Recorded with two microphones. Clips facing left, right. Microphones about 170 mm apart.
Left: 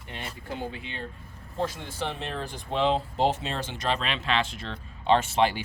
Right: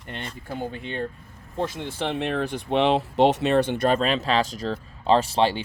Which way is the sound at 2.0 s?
65° right (ahead or behind).